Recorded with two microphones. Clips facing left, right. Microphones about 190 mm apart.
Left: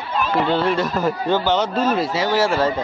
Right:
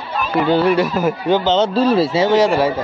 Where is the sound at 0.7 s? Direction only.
10° right (ahead or behind).